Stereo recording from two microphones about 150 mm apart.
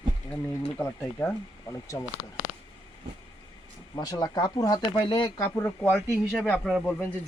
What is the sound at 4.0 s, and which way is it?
Speech, 25° left (ahead or behind).